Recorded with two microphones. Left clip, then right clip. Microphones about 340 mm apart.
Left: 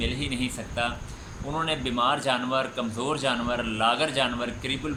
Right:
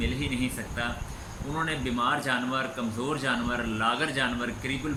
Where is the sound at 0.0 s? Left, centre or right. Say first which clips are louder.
Left 1 dB; centre.